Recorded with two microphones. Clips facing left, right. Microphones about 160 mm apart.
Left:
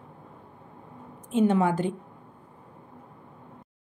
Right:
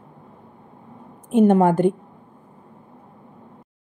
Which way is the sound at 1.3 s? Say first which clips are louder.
Right 7 dB; 50° right (ahead or behind).